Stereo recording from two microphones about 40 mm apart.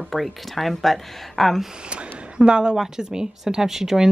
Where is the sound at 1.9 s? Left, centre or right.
Right.